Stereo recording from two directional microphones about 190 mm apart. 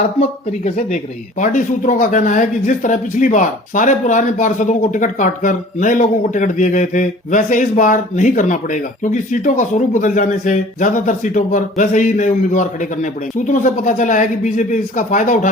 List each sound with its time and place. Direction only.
0.2 s speech: 35° left (ahead or behind)